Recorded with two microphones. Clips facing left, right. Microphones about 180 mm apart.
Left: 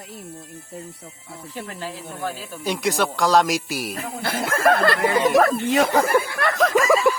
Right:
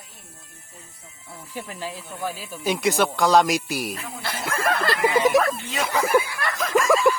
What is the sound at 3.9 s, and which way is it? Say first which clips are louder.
Speech: left 5 dB; 45° left (ahead or behind).